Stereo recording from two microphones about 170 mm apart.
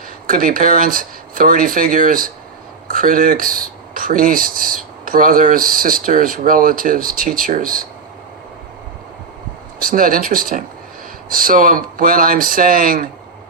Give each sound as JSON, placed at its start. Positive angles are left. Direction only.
{"t": 0.3, "sound": "speech", "side_deg": -55}
{"t": 9.8, "sound": "speech", "side_deg": -55}